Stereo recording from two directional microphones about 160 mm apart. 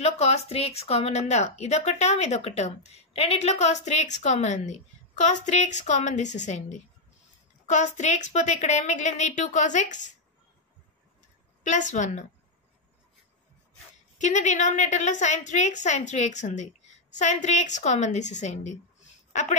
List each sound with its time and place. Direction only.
0.0 s a woman's voice: 40° left (ahead or behind)
11.6 s a woman's voice: 50° left (ahead or behind)
14.1 s a woman's voice: 50° left (ahead or behind)